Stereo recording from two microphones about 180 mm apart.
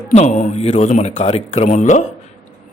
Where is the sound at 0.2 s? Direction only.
45° left (ahead or behind).